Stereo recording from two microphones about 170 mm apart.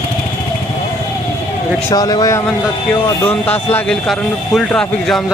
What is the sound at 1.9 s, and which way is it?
Speech, 20° left (ahead or behind).